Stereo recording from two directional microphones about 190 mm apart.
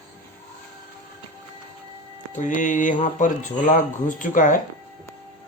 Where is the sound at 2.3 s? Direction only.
40° left (ahead or behind).